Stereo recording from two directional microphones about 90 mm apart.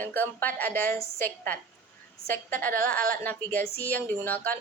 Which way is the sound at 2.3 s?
20° left (ahead or behind).